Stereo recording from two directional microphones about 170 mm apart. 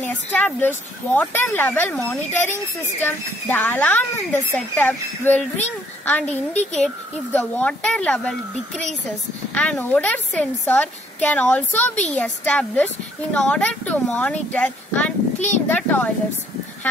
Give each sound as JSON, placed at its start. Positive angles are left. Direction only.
{"t": 0.0, "sound": "a woman's voice", "side_deg": 10}
{"t": 15.3, "sound": "a child's voice", "side_deg": 45}
{"t": 15.7, "sound": "a woman's voice", "side_deg": 10}